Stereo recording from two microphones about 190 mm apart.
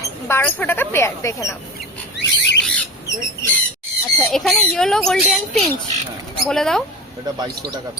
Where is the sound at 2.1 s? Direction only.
70° left (ahead or behind).